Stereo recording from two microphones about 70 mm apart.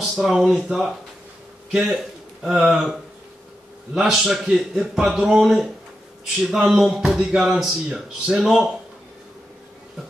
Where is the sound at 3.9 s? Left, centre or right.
Centre.